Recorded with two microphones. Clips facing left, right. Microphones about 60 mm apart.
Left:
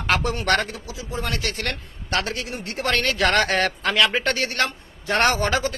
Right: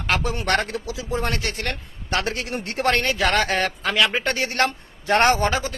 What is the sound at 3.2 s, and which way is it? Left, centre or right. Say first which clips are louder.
Speech: left 1 dB; centre.